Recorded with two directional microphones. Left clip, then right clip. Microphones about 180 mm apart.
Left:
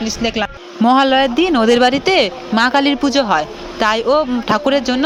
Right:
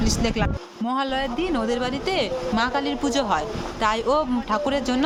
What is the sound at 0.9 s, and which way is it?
Speech, 45° left (ahead or behind).